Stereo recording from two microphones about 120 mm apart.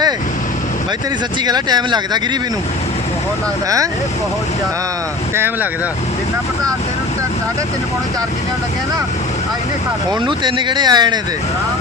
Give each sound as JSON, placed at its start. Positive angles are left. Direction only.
{"t": 1.5, "sound": "speech", "side_deg": -35}
{"t": 10.2, "sound": "speech", "side_deg": -40}